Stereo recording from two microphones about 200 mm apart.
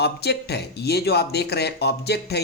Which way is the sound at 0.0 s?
55° left (ahead or behind).